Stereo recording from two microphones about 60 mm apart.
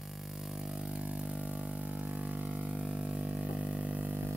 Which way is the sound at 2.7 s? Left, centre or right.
Centre.